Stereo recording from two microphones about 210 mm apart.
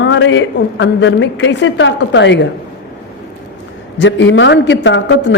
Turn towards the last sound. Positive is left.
turn(degrees=55)  # may be behind; listen again after turning